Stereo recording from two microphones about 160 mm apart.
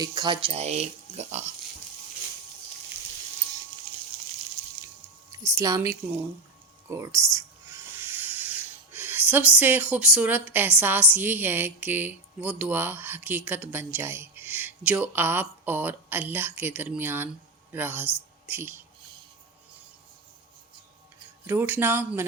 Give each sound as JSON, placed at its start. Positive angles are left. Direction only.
{"t": 0.0, "sound": "speech", "side_deg": -25}
{"t": 5.5, "sound": "speech", "side_deg": -20}
{"t": 21.4, "sound": "speech", "side_deg": -10}